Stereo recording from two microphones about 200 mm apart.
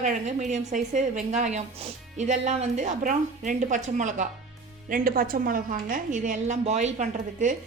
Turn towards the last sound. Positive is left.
turn(degrees=-40)  # may be behind; listen again after turning